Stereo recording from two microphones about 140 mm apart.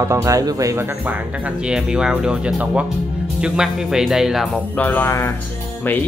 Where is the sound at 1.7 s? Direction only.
5° right (ahead or behind).